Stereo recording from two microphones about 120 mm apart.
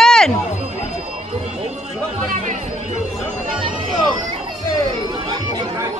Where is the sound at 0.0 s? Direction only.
5° left (ahead or behind).